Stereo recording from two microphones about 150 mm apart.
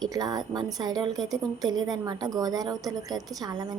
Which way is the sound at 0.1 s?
25° right (ahead or behind).